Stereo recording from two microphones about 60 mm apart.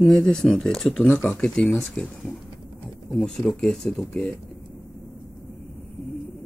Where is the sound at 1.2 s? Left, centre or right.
Centre.